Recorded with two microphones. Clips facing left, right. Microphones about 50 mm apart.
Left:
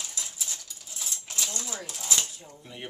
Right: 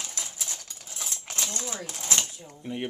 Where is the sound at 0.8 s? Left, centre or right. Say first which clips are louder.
Right 2 dB; right.